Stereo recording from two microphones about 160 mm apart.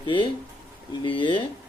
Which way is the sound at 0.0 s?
30° left (ahead or behind).